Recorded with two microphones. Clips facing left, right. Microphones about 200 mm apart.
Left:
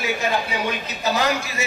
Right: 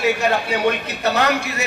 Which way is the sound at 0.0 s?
65° right (ahead or behind).